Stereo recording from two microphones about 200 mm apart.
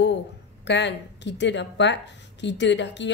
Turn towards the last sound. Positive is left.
turn(degrees=60)  # may be behind; listen again after turning